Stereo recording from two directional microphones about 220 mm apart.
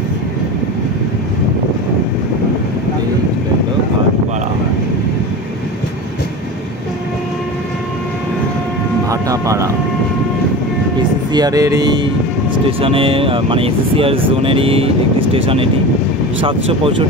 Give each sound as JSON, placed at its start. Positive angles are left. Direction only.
{"t": 9.1, "sound": "vehicle", "side_deg": -15}
{"t": 11.3, "sound": "speech", "side_deg": -15}